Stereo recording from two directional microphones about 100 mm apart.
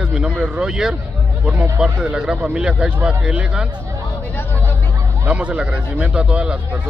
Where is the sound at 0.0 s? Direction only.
10° right (ahead or behind).